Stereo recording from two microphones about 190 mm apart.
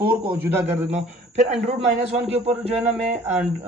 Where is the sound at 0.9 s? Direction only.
35° right (ahead or behind).